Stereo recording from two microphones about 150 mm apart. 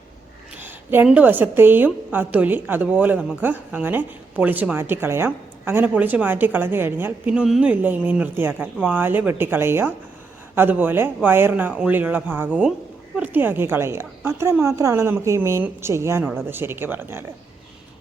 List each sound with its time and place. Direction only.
0.6 s a woman's voice: 15° right (ahead or behind)